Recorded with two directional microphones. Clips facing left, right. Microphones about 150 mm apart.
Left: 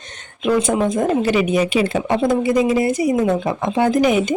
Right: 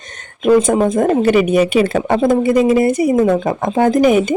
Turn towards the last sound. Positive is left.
turn(degrees=-45)  # may be behind; listen again after turning